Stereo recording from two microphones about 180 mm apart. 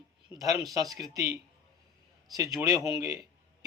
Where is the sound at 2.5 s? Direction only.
20° right (ahead or behind).